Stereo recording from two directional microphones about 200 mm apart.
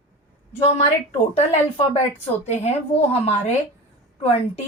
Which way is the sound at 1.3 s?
30° left (ahead or behind).